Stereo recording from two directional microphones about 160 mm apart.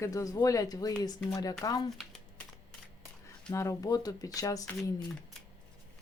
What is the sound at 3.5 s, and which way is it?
Speech, 20° left (ahead or behind).